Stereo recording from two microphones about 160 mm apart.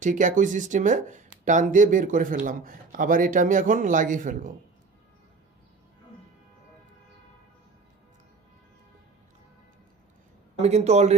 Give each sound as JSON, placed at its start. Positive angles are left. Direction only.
{"t": 0.0, "sound": "speech", "side_deg": -50}
{"t": 10.6, "sound": "speech", "side_deg": -45}